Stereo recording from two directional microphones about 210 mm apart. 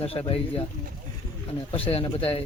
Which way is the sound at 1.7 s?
25° left (ahead or behind).